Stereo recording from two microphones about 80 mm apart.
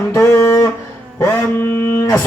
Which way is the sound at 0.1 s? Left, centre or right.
Left.